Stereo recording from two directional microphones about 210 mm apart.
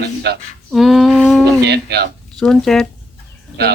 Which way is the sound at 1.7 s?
50° right (ahead or behind).